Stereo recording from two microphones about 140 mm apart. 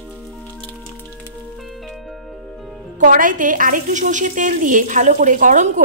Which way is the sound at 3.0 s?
75° right (ahead or behind).